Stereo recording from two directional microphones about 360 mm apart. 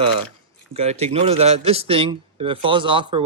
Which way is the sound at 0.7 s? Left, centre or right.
Centre.